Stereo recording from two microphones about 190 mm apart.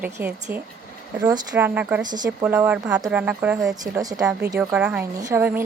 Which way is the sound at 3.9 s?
20° right (ahead or behind).